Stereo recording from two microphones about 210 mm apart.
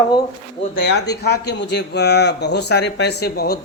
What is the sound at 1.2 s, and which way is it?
Speech, 50° left (ahead or behind).